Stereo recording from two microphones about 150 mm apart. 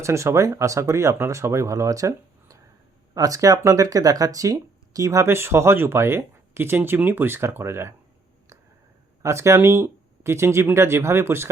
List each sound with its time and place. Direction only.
0.0 s speech: 20° right (ahead or behind)
9.2 s speech: 20° right (ahead or behind)